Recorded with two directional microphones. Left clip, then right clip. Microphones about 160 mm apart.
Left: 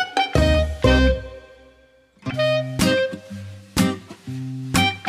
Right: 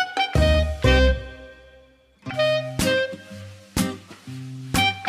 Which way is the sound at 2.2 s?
Centre (ahead or behind).